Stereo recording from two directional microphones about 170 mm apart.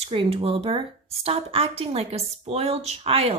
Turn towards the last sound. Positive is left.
turn(degrees=-35)  # may be behind; listen again after turning